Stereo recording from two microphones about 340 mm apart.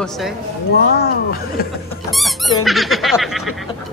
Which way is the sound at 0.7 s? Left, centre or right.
Left.